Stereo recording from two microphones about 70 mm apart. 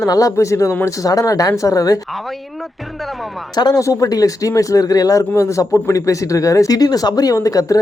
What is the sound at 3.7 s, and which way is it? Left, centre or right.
Speech, left.